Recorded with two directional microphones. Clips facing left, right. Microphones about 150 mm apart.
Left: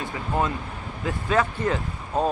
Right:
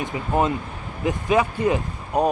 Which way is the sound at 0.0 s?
20° right (ahead or behind).